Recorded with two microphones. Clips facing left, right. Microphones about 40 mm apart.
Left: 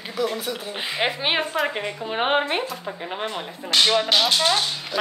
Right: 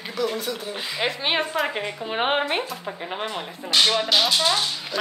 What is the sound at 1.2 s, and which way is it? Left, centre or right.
Speech, centre.